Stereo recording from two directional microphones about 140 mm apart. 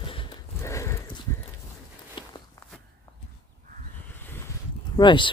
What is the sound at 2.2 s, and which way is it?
Walk, 35° left (ahead or behind).